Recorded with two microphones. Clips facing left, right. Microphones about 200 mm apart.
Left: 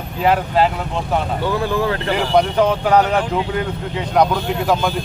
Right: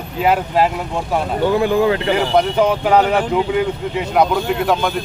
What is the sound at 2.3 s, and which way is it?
Speech, 10° right (ahead or behind).